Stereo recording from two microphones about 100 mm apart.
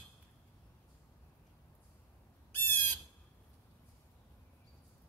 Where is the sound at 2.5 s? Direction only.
20° left (ahead or behind).